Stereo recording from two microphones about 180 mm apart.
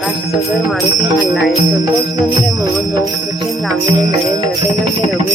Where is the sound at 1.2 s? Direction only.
Centre (ahead or behind).